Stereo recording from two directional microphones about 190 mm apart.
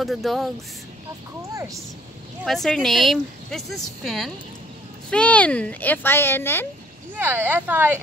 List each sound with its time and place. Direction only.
0.0 s speech: centre (ahead or behind)
1.5 s speech: 15° right (ahead or behind)
2.4 s speech: centre (ahead or behind)
7.2 s speech: 10° right (ahead or behind)